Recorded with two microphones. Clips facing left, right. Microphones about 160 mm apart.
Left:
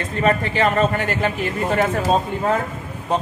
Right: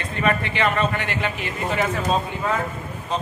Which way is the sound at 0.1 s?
35° left (ahead or behind).